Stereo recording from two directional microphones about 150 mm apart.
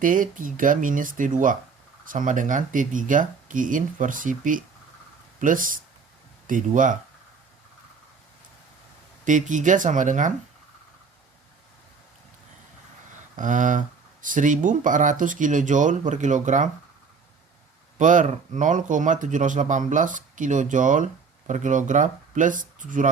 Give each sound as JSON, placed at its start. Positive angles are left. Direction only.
{"t": 0.0, "sound": "speech", "side_deg": -60}
{"t": 9.2, "sound": "speech", "side_deg": -55}
{"t": 13.3, "sound": "speech", "side_deg": -60}
{"t": 17.9, "sound": "speech", "side_deg": -60}